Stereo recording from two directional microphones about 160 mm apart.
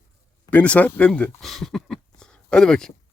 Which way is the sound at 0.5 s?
10° left (ahead or behind).